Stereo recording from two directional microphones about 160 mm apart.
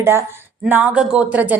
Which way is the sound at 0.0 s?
15° right (ahead or behind).